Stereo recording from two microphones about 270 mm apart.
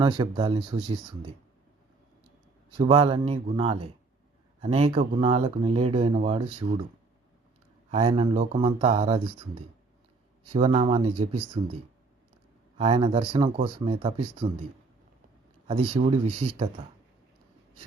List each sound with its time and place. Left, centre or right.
0.0 s speech: centre
2.7 s speech: centre
7.9 s speech: right
10.5 s speech: right
12.7 s speech: centre
15.6 s speech: right